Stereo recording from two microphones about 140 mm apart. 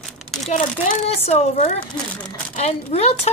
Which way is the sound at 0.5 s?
55° left (ahead or behind).